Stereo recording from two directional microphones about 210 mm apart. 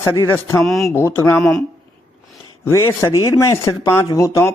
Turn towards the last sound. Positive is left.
turn(degrees=15)  # may be behind; listen again after turning